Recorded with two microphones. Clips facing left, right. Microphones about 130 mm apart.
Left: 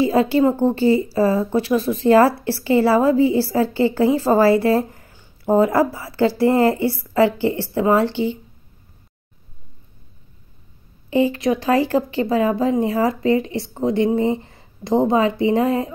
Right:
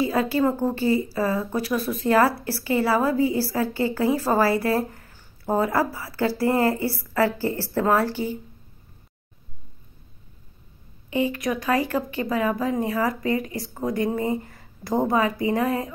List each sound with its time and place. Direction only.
0.0 s speech: 30° left (ahead or behind)
11.1 s speech: 30° left (ahead or behind)